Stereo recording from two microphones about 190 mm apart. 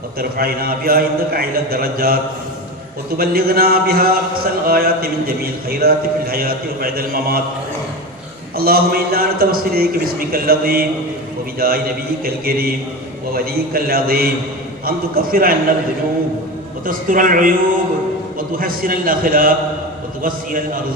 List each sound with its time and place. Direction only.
0.2 s a man's voice: 50° right (ahead or behind)
3.2 s a man's voice: 55° right (ahead or behind)
8.5 s a man's voice: 50° right (ahead or behind)
16.8 s a man's voice: 45° right (ahead or behind)